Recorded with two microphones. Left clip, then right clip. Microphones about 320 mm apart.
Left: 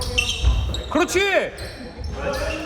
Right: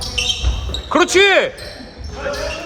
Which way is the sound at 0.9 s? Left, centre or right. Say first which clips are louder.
Right 7 dB; right.